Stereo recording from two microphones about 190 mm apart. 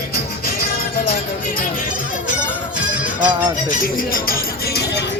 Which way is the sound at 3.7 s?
45° left (ahead or behind).